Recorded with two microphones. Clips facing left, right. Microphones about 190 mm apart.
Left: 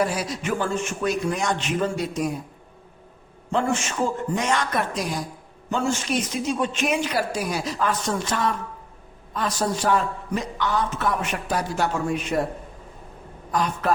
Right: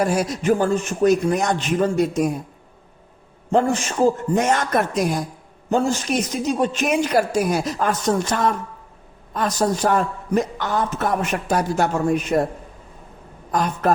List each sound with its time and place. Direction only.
0.0 s a man's voice: 45° right (ahead or behind)
3.5 s a man's voice: 40° right (ahead or behind)
5.7 s a man's voice: 35° right (ahead or behind)
13.5 s a man's voice: 45° right (ahead or behind)